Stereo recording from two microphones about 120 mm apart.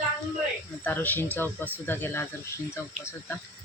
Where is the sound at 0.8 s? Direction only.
15° left (ahead or behind).